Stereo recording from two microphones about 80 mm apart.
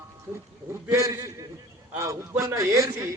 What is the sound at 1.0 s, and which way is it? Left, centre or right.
A man's voice, right.